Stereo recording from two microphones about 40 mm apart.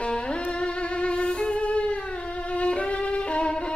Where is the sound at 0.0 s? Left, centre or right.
Left.